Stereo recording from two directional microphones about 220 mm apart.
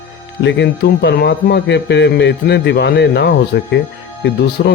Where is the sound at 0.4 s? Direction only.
50° left (ahead or behind).